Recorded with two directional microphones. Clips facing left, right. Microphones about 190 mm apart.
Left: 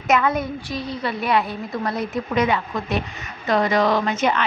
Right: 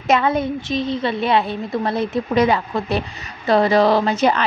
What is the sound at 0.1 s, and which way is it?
A woman's voice, 30° right (ahead or behind).